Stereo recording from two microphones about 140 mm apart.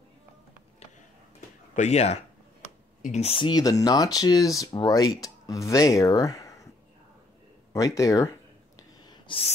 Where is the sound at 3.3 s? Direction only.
30° left (ahead or behind).